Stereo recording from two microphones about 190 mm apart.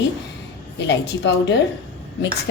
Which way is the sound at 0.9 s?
70° left (ahead or behind).